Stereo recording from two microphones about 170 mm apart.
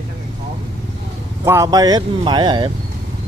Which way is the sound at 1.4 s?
15° right (ahead or behind).